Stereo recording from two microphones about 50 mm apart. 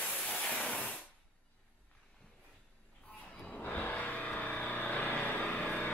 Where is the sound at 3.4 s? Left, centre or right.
Centre.